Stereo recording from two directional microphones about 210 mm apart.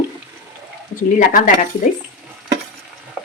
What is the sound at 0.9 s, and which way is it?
Speech, 40° left (ahead or behind).